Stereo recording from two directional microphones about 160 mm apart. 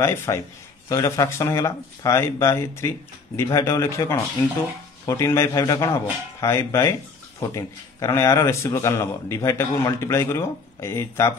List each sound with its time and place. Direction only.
0.0 s speech: 15° left (ahead or behind)